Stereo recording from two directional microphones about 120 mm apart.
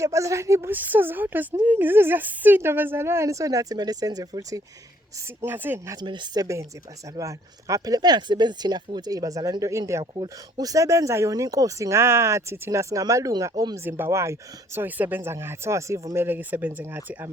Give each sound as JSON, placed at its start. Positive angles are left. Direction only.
{"t": 0.0, "sound": "speech", "side_deg": -25}
{"t": 5.4, "sound": "speech", "side_deg": -15}
{"t": 6.0, "sound": "speech", "side_deg": -40}
{"t": 13.8, "sound": "speech", "side_deg": -20}